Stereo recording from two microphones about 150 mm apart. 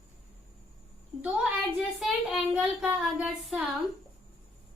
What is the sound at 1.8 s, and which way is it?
Child singing, 5° right (ahead or behind).